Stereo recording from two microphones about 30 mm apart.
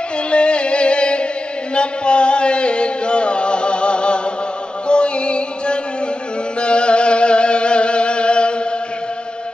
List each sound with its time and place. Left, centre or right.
0.3 s music: left